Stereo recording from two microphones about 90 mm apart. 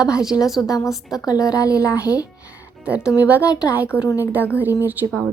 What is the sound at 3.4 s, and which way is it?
Speech, 45° left (ahead or behind).